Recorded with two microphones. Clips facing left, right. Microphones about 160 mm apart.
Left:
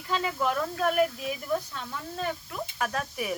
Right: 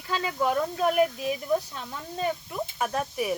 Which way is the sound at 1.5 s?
20° right (ahead or behind).